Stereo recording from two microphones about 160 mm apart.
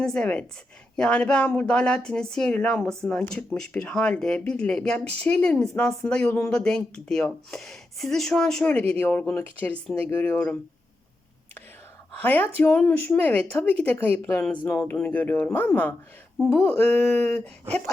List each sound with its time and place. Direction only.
0.0 s speech: 5° left (ahead or behind)
12.2 s speech: 10° left (ahead or behind)
14.8 s speech: 10° left (ahead or behind)